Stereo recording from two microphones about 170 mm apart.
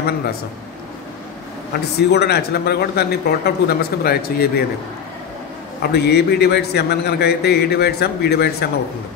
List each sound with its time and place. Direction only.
1.7 s a man's voice: 75° left (ahead or behind)
5.8 s a man's voice: 75° left (ahead or behind)